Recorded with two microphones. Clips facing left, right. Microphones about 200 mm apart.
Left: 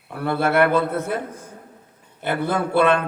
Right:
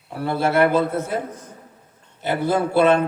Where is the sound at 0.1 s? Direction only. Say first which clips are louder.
Even; 55° left (ahead or behind).